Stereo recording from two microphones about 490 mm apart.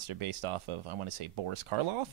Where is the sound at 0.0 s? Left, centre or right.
Right.